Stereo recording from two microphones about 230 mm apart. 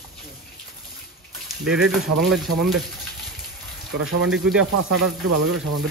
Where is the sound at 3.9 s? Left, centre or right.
Right.